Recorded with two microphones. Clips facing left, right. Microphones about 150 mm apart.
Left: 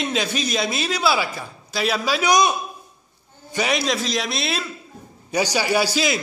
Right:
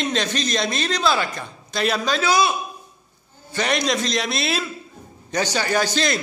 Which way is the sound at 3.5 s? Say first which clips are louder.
Even; 5° left (ahead or behind).